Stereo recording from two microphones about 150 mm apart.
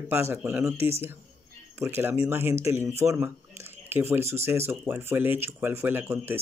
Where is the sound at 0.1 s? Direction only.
15° right (ahead or behind).